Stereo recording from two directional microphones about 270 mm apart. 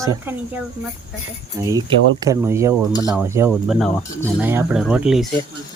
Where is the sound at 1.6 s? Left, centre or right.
Centre.